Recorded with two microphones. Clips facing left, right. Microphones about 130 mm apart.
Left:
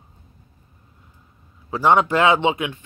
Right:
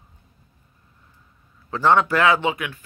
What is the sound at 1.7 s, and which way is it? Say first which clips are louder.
A man's voice: left 1 dB; 15° left (ahead or behind).